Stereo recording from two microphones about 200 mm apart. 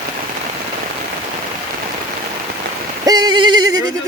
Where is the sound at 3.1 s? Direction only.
20° right (ahead or behind).